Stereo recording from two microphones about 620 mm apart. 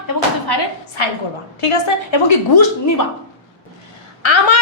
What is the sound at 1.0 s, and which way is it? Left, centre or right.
A woman's voice, left.